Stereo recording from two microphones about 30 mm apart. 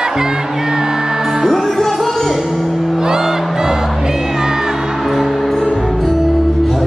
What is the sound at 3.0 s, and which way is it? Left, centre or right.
Music, centre.